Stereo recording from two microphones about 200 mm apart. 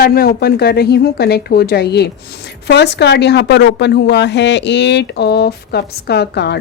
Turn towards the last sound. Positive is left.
turn(degrees=55)  # may be behind; listen again after turning